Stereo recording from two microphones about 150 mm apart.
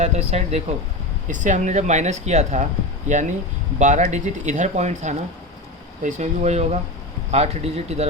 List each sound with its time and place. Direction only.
0.0 s speech: 50° right (ahead or behind)